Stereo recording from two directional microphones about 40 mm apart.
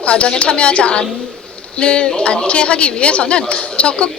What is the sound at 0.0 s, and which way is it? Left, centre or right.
A woman's voice, left.